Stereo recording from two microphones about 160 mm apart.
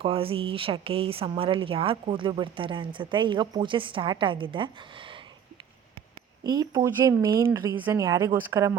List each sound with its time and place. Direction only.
0.0 s speech: 35° right (ahead or behind)
6.4 s speech: 25° right (ahead or behind)